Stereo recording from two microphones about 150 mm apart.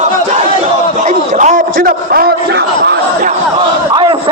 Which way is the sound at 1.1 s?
55° right (ahead or behind).